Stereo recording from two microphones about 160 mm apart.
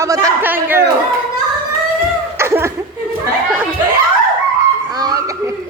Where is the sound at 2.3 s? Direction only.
15° right (ahead or behind).